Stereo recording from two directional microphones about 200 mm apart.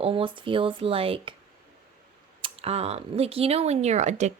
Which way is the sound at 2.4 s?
30° right (ahead or behind).